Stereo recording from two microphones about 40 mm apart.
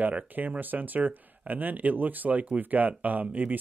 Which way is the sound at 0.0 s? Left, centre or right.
Right.